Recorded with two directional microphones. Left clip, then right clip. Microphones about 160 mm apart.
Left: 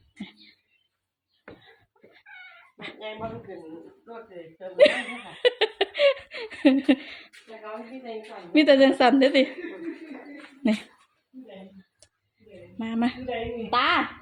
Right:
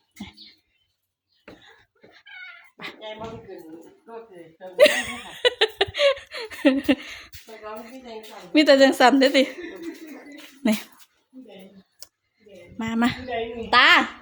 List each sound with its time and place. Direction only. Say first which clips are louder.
2.7 s music: right 2 dB; 5° right (ahead or behind)
4.5 s a sound: right 2 dB; 10° right (ahead or behind)
8.5 s a woman's voice: right 2 dB; 10° right (ahead or behind)
10.6 s speech: right 2 dB; 15° right (ahead or behind)
12.8 s a woman's voice: right 4 dB; 20° right (ahead or behind)
13.7 s a woman's voice: right 7 dB; 30° right (ahead or behind)